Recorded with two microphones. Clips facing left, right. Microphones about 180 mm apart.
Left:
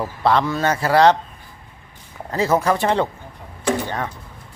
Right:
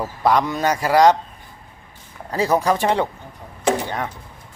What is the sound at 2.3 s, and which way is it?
Speech, 15° right (ahead or behind).